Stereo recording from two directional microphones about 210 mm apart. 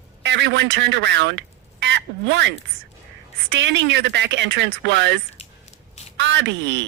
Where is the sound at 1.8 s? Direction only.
55° right (ahead or behind).